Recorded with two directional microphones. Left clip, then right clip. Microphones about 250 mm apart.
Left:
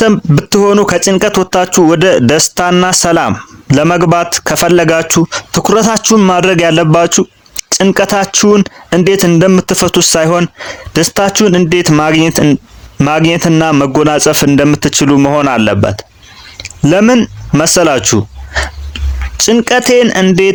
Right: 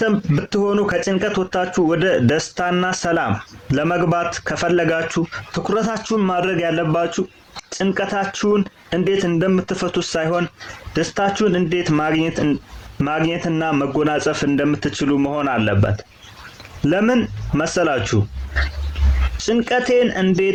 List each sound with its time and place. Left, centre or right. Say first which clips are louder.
0.0 s speech: left 10 dB; left
19.4 s speech: left 10 dB; left